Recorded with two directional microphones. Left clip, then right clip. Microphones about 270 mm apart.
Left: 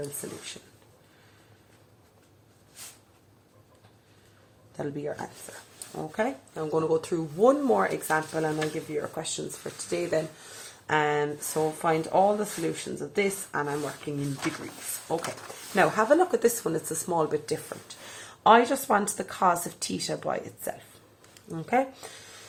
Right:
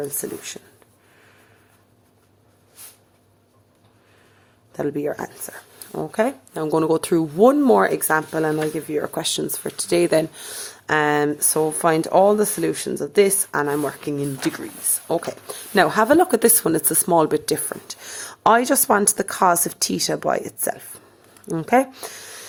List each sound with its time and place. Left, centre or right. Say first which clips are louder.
0.2 s speech: right 8 dB; right
4.8 s speech: right 9 dB; right
15.7 s speech: right 6 dB; right